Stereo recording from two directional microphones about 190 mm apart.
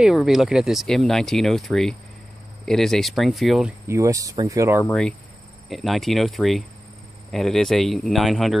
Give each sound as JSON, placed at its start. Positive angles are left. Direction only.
{"t": 0.0, "sound": "speech", "side_deg": 0}
{"t": 3.8, "sound": "speech", "side_deg": -15}
{"t": 4.8, "sound": "speech", "side_deg": 5}